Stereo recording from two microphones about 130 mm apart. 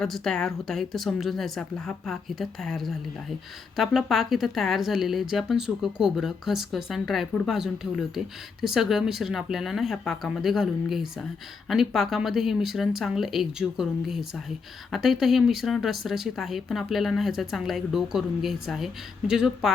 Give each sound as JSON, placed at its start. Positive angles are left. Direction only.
{"t": 0.0, "sound": "speech", "side_deg": 5}